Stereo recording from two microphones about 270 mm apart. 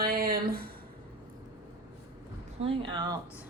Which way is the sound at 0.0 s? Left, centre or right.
Right.